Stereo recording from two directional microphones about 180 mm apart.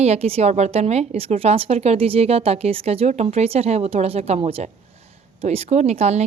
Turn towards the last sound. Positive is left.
turn(degrees=-35)  # may be behind; listen again after turning